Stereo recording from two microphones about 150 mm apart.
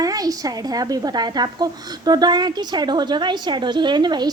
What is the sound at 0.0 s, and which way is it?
A woman's voice, 25° right (ahead or behind).